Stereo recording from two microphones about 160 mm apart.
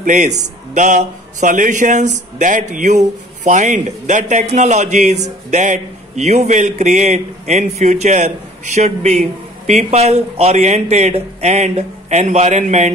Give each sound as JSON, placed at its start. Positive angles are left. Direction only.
{"t": 0.0, "sound": "a man's voice", "side_deg": -50}